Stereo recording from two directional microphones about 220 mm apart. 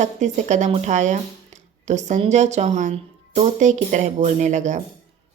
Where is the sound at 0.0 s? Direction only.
30° right (ahead or behind).